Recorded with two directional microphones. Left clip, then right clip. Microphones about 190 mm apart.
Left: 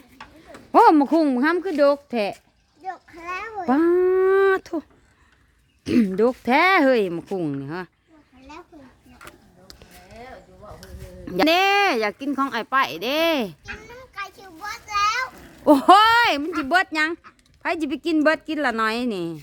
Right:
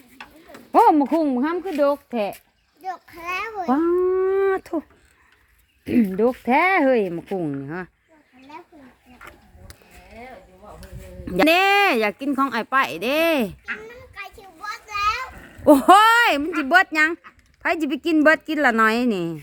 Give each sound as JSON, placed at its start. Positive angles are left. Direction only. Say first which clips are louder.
{"t": 0.7, "sound": "a sound", "louder": "left 1 dB", "side_deg": 20}
{"t": 0.9, "sound": "a woman's voice", "louder": "left 1 dB", "side_deg": 30}
{"t": 2.8, "sound": "children playing", "louder": "right 2 dB", "side_deg": -45}
{"t": 3.7, "sound": "a sound", "louder": "left 2 dB", "side_deg": 30}
{"t": 4.6, "sound": "speech", "louder": "right 2 dB", "side_deg": 0}
{"t": 5.8, "sound": "speech", "louder": "even", "side_deg": 25}
{"t": 11.3, "sound": "speech", "louder": "right 2 dB", "side_deg": -5}
{"t": 15.6, "sound": "speech", "louder": "right 1 dB", "side_deg": -5}